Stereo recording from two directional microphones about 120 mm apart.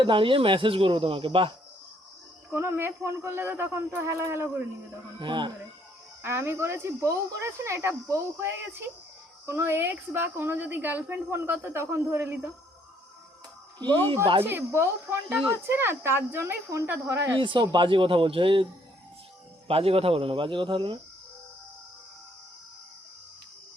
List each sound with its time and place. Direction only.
0.0 s speech: 45° right (ahead or behind)
2.5 s a woman's voice: 20° right (ahead or behind)
5.2 s speech: 40° right (ahead or behind)
6.2 s a woman's voice: 20° right (ahead or behind)
13.7 s speech: 40° right (ahead or behind)
14.4 s a woman's voice: 20° right (ahead or behind)
17.3 s speech: 40° right (ahead or behind)
19.6 s speech: 55° right (ahead or behind)